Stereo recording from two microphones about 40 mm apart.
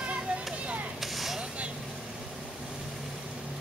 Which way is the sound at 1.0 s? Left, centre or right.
Centre.